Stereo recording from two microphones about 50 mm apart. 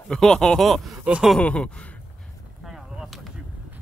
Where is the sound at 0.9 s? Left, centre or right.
Right.